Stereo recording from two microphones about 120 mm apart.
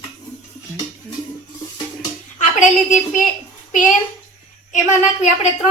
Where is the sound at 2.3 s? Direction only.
90° left.